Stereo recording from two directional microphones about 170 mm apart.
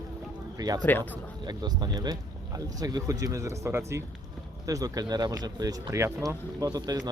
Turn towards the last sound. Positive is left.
turn(degrees=-25)  # may be behind; listen again after turning